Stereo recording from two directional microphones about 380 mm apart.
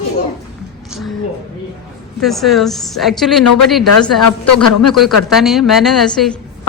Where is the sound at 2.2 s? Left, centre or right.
Centre.